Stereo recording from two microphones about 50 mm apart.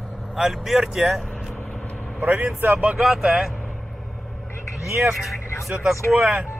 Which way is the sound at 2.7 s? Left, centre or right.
Right.